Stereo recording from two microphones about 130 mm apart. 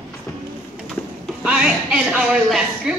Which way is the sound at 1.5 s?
5° right (ahead or behind).